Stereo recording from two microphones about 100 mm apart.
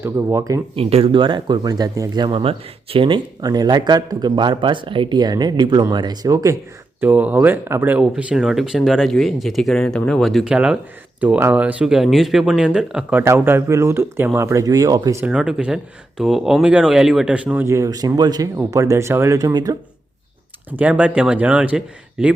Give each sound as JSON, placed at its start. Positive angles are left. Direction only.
{"t": 0.0, "sound": "speech", "side_deg": -25}
{"t": 0.8, "sound": "speech", "side_deg": -75}
{"t": 1.1, "sound": "speech", "side_deg": -50}
{"t": 2.4, "sound": "speech", "side_deg": -70}
{"t": 3.4, "sound": "speech", "side_deg": -40}
{"t": 7.0, "sound": "speech", "side_deg": -20}
{"t": 7.9, "sound": "speech", "side_deg": -10}
{"t": 10.5, "sound": "speech", "side_deg": -10}
{"t": 13.2, "sound": "speech", "side_deg": -25}
{"t": 15.2, "sound": "speech", "side_deg": -10}
{"t": 17.7, "sound": "speech", "side_deg": -30}
{"t": 19.4, "sound": "speech", "side_deg": -35}
{"t": 20.7, "sound": "speech", "side_deg": -15}